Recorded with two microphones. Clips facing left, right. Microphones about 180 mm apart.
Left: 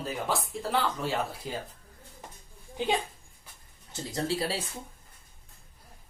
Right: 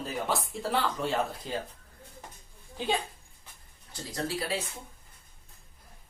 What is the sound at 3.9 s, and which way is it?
Speech, 25° left (ahead or behind).